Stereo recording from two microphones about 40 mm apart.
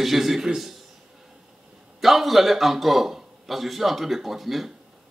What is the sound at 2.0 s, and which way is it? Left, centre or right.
Speech, centre.